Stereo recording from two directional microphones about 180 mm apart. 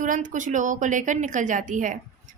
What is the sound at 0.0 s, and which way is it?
A woman's voice, 45° right (ahead or behind).